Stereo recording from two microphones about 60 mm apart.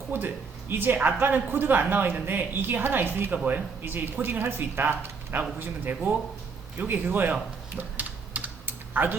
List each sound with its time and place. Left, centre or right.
0.1 s speech: right
7.8 s typing: right